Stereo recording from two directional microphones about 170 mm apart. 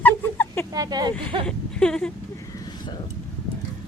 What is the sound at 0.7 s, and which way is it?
Speech, 20° right (ahead or behind).